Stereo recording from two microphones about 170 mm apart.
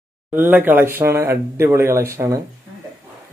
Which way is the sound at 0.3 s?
10° right (ahead or behind).